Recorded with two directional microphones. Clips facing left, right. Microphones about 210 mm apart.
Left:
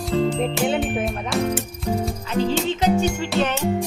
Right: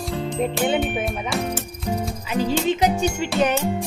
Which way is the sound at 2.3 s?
10° right (ahead or behind).